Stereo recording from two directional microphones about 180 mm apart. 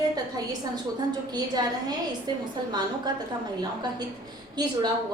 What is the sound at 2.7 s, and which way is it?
Speech, 25° right (ahead or behind).